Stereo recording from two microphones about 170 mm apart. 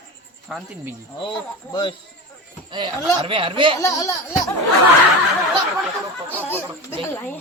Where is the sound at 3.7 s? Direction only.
20° left (ahead or behind).